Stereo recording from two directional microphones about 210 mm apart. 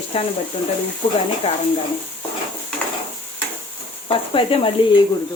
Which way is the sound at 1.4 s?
30° left (ahead or behind).